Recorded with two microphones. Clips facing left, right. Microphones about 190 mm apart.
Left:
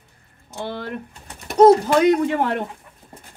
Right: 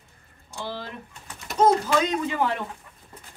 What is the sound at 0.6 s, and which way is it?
A woman's voice, 60° left (ahead or behind).